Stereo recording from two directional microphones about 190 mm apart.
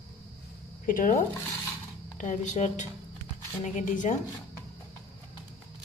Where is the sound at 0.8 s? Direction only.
45° left (ahead or behind).